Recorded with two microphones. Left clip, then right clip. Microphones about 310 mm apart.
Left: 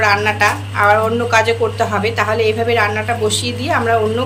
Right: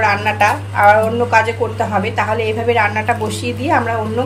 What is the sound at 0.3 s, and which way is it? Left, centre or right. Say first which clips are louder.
Speech: right 1 dB; left.